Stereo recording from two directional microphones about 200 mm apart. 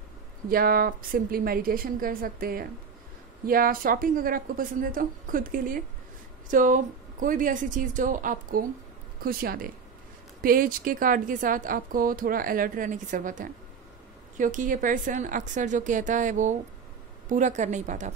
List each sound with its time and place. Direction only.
0.5 s a woman's voice: 45° right (ahead or behind)